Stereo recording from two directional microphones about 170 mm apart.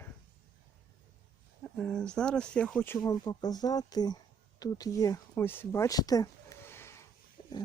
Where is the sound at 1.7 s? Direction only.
5° left (ahead or behind).